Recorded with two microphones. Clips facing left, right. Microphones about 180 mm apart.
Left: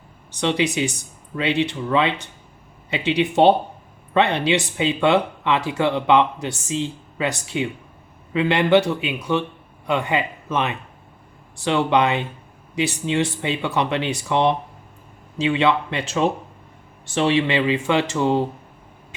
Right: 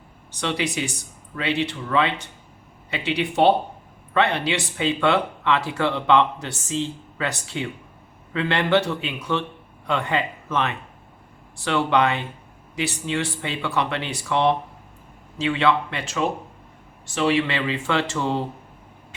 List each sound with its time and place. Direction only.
0.3 s speech: 20° left (ahead or behind)